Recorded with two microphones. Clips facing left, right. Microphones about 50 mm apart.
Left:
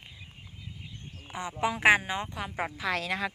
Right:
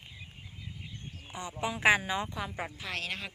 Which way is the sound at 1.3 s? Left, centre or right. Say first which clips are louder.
Left 5 dB; left.